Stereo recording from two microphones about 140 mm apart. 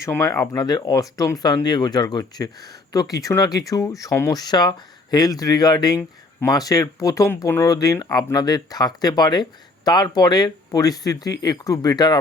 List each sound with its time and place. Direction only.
0.0 s speech: 20° left (ahead or behind)